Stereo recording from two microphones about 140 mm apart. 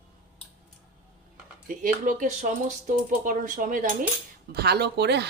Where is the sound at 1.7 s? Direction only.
65° right (ahead or behind).